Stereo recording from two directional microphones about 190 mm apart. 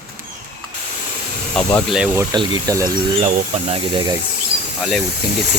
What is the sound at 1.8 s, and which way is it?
Speech, 5° right (ahead or behind).